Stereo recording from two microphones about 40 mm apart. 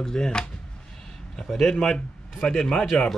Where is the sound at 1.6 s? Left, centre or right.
Centre.